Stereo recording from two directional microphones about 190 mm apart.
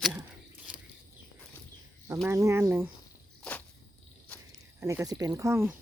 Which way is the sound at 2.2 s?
15° right (ahead or behind).